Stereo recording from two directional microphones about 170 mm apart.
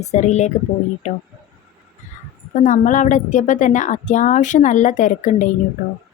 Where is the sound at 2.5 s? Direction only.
45° left (ahead or behind).